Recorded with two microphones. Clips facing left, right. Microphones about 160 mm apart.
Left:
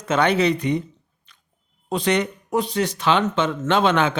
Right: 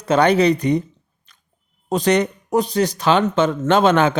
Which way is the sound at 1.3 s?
40° right (ahead or behind).